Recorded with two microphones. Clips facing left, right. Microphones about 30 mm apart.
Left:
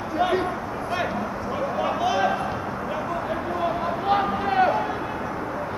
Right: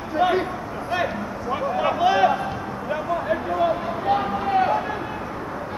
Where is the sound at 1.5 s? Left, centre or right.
Right.